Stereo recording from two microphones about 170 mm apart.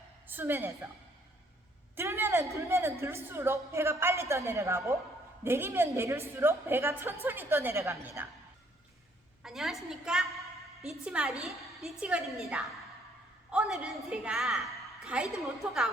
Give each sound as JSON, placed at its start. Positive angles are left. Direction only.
{"t": 0.3, "sound": "a woman's voice", "side_deg": -10}
{"t": 2.0, "sound": "a woman's voice", "side_deg": -15}
{"t": 9.4, "sound": "a woman's voice", "side_deg": 0}